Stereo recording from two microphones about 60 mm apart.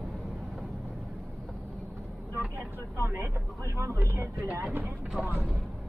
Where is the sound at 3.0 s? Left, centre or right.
Right.